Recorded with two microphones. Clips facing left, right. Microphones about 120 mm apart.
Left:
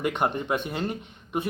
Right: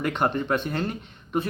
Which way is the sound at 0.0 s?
10° left (ahead or behind).